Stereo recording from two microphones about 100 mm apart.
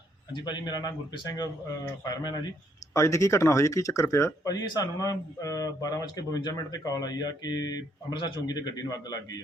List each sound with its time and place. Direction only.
0.3 s speech: 45° left (ahead or behind)
2.9 s speech: 30° left (ahead or behind)